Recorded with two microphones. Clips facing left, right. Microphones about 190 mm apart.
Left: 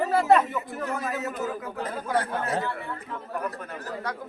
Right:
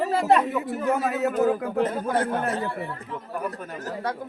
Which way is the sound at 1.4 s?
60° right (ahead or behind).